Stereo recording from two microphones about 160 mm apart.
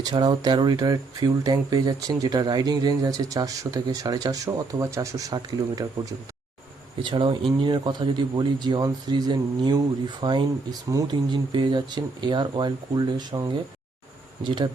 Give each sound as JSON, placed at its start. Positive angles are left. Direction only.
{"t": 0.0, "sound": "speech", "side_deg": -25}